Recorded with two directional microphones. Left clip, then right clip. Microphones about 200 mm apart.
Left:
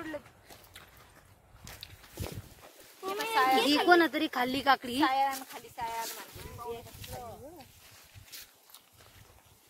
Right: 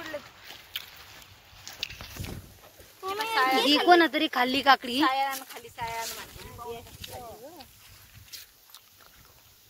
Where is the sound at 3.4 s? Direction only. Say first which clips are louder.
Right 1 dB; 40° left (ahead or behind).